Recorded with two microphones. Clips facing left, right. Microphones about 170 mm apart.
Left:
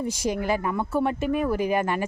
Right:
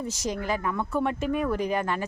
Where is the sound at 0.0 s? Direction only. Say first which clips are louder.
Left 4 dB; 10° left (ahead or behind).